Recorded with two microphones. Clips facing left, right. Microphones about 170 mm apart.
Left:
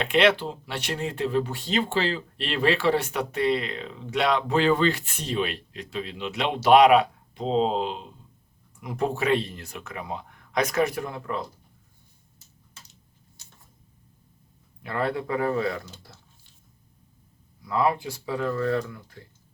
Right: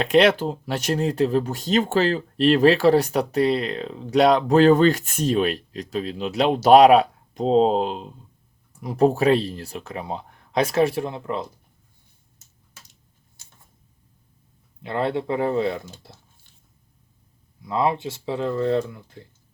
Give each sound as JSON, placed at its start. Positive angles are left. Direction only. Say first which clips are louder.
{"t": 0.0, "sound": "speech", "louder": "right 4 dB", "side_deg": -40}
{"t": 14.8, "sound": "speech", "louder": "right 3 dB", "side_deg": -25}
{"t": 17.6, "sound": "speech", "louder": "right 2 dB", "side_deg": -25}